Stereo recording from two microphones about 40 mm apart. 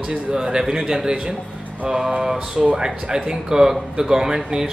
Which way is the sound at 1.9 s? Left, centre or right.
Right.